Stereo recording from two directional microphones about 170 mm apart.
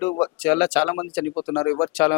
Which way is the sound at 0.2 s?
10° left (ahead or behind).